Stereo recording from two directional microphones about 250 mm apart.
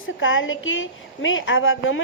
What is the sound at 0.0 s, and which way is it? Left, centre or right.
A woman's voice, left.